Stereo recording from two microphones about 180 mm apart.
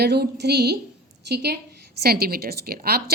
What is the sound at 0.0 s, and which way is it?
A woman's voice, 65° right (ahead or behind).